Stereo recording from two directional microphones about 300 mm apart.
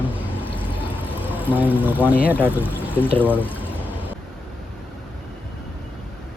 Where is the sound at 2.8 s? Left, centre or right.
Centre.